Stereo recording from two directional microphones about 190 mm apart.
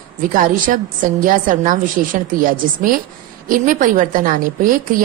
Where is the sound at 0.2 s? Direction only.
45° right (ahead or behind).